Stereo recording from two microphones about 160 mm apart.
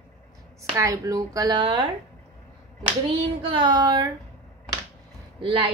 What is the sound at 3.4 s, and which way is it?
Speech, 30° right (ahead or behind).